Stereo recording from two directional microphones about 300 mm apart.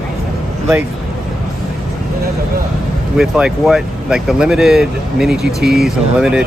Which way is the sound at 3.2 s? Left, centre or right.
Centre.